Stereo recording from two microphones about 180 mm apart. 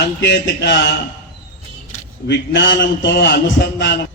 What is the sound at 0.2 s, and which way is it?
Speech, 75° left (ahead or behind).